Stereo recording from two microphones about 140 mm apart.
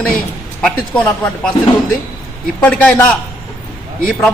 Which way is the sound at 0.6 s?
10° left (ahead or behind).